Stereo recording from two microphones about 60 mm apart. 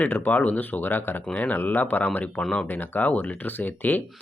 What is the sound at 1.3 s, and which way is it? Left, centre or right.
Speech, left.